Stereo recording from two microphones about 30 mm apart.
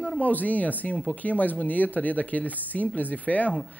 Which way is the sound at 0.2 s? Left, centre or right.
Left.